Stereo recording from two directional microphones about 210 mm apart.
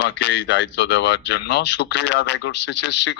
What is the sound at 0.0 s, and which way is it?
Speech, 55° left (ahead or behind).